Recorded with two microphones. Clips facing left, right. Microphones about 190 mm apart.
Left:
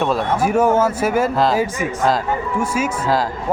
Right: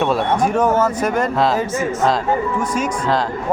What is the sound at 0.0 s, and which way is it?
Speech, 5° left (ahead or behind).